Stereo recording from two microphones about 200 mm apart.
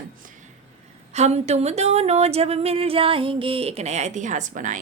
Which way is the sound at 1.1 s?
35° right (ahead or behind).